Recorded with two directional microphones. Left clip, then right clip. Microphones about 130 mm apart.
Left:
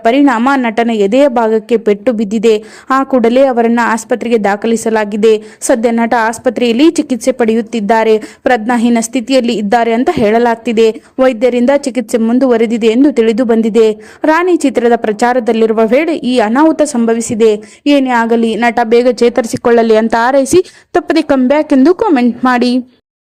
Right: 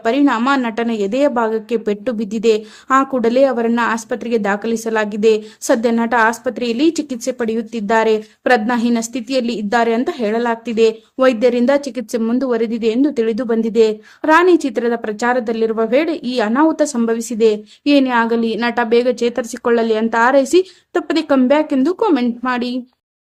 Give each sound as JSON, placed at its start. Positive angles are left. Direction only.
{"t": 0.0, "sound": "a woman's voice", "side_deg": 40}
{"t": 22.4, "sound": "speech", "side_deg": 55}